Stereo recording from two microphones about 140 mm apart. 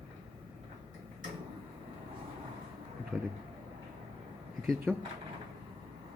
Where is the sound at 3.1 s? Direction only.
Centre (ahead or behind).